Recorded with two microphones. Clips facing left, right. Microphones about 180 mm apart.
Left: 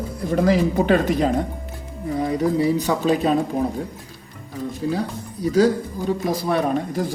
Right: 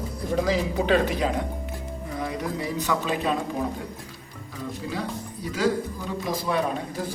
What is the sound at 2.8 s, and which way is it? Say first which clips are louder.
Speech: left 6 dB; 35° left (ahead or behind).